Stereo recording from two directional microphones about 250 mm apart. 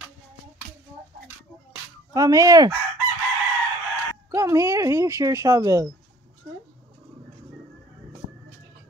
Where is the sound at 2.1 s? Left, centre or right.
Centre.